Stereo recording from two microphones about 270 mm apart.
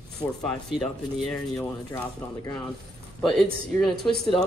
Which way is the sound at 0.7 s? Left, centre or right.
Centre.